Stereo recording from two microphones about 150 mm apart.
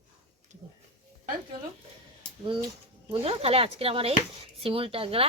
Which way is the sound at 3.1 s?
40° right (ahead or behind).